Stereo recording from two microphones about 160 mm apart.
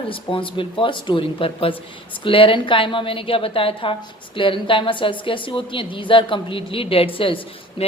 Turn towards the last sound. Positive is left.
turn(degrees=35)  # may be behind; listen again after turning